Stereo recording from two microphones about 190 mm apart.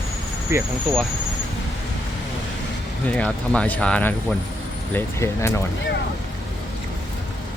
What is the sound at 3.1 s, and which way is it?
Speech, 5° left (ahead or behind).